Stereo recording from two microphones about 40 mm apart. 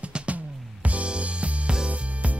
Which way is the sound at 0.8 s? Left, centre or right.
Right.